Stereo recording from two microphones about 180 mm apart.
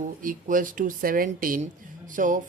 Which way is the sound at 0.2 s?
45° right (ahead or behind).